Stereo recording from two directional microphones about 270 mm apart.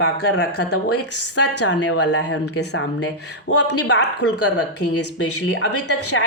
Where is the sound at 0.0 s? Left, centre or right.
Left.